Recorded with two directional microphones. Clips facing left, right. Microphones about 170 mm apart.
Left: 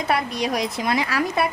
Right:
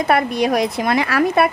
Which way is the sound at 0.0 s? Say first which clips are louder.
Right 6 dB; 55° right (ahead or behind).